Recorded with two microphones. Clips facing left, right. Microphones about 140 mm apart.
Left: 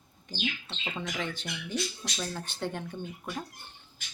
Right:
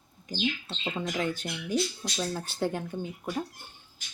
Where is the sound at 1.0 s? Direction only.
35° right (ahead or behind).